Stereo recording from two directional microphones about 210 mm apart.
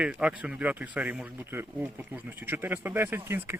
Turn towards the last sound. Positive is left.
turn(degrees=-10)  # may be behind; listen again after turning